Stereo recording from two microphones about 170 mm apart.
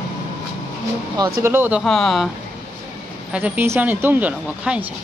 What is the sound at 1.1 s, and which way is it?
Speech, 15° right (ahead or behind).